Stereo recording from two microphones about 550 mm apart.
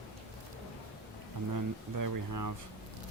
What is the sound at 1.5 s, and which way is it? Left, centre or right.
Speech, right.